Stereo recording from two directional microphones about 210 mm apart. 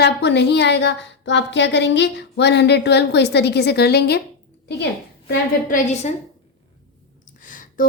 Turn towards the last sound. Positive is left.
turn(degrees=40)  # may be behind; listen again after turning